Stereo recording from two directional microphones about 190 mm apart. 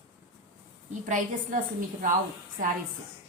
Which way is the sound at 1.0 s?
40° right (ahead or behind).